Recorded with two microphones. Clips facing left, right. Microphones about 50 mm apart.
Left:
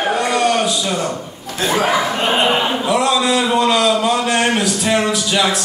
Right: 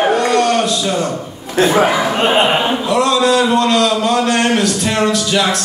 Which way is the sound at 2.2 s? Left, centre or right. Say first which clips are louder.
Right 5 dB; centre.